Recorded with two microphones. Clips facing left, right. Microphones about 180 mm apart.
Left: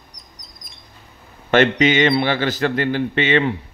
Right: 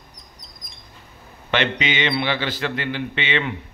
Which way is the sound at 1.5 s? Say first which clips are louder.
Left 8 dB; 45° left (ahead or behind).